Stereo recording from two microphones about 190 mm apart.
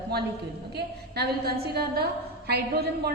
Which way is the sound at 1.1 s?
55° right (ahead or behind).